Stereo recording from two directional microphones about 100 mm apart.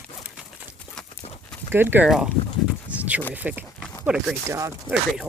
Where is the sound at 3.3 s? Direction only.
15° right (ahead or behind).